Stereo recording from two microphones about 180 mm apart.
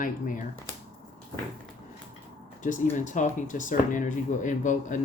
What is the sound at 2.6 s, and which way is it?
Speech, 45° left (ahead or behind).